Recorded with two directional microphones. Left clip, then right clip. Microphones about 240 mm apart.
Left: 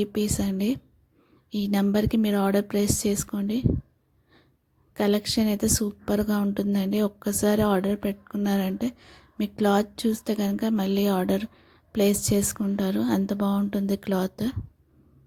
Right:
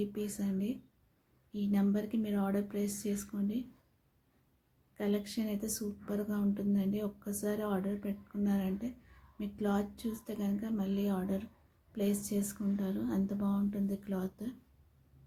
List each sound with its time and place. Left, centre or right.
0.0 s a woman's voice: left
4.9 s a woman's voice: left